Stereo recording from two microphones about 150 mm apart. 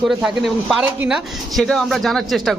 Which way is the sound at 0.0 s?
Centre (ahead or behind).